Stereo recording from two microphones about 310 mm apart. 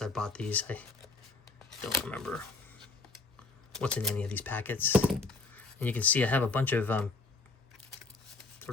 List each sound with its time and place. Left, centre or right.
0.0 s speech: centre